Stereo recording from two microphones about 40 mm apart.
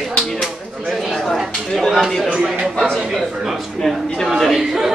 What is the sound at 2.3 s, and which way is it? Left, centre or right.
Speech, centre.